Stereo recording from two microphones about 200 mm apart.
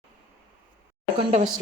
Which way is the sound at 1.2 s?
30° right (ahead or behind).